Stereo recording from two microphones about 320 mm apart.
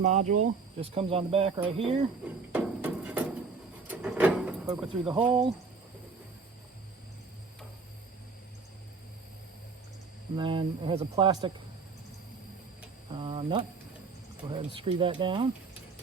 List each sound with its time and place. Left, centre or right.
0.0 s speech: right
2.5 s a sound: centre
10.3 s speech: centre
13.1 s speech: centre